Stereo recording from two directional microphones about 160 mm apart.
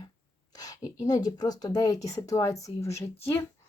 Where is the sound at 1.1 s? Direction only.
25° left (ahead or behind).